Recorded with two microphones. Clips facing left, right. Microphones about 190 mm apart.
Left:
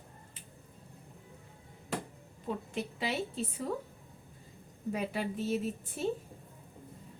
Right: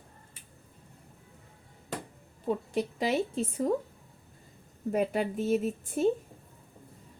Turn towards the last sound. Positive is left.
turn(degrees=-45)  # may be behind; listen again after turning